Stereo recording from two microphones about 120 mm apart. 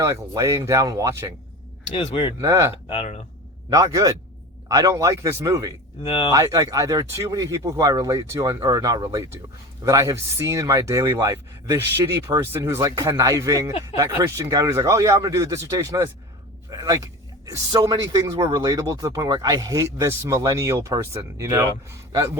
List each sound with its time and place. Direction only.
0.0 s speech: 25° right (ahead or behind)
2.0 s speech: 45° left (ahead or behind)
2.4 s speech: 25° right (ahead or behind)
2.7 s speech: 55° left (ahead or behind)
3.7 s speech: 30° right (ahead or behind)
6.0 s speech: 45° left (ahead or behind)
6.3 s speech: 30° right (ahead or behind)
16.6 s a sound: 30° right (ahead or behind)
17.7 s speech: 30° right (ahead or behind)